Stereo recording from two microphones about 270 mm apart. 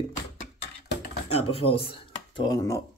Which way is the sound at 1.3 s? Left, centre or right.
Left.